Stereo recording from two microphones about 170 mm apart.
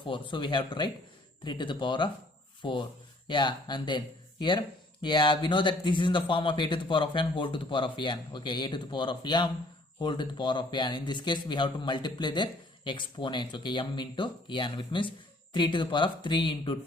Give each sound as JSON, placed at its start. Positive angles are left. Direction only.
{"t": 0.0, "sound": "speech", "side_deg": 30}
{"t": 2.6, "sound": "rub", "side_deg": 30}
{"t": 3.2, "sound": "speech", "side_deg": 25}